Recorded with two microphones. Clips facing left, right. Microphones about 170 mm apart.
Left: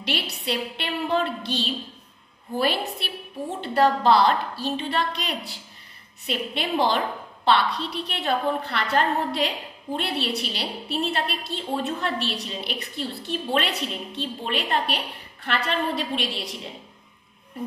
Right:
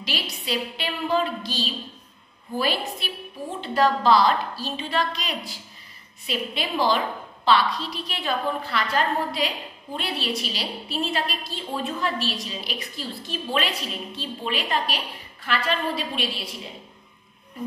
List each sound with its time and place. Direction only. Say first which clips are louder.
0.0 s a woman's voice: left 3 dB; 65° left (ahead or behind)